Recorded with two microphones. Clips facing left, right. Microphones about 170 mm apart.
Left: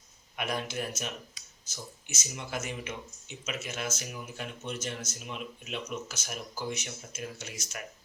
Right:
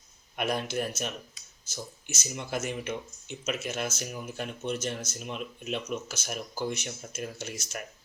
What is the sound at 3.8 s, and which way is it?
Speech, 35° right (ahead or behind).